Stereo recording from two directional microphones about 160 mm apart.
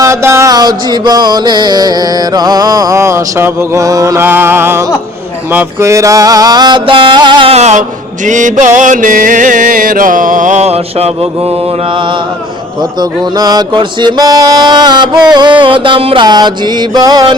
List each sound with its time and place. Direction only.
0.0 s music: 15° right (ahead or behind); by 11.5 s 40° right (ahead or behind)
13.0 s music: 25° right (ahead or behind)